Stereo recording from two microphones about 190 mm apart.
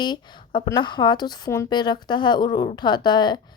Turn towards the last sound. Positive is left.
turn(degrees=20)  # may be behind; listen again after turning